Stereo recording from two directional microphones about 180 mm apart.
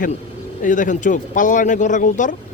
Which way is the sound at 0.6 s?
45° left (ahead or behind).